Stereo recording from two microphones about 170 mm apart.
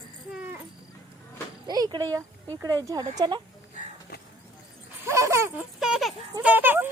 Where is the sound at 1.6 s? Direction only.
25° right (ahead or behind).